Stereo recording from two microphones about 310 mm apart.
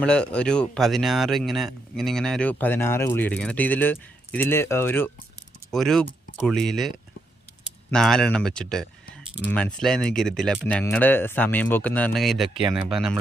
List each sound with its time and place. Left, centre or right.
0.0 s speech: centre